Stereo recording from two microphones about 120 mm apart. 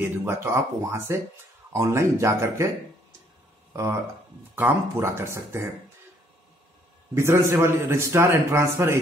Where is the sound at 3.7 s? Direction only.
25° right (ahead or behind).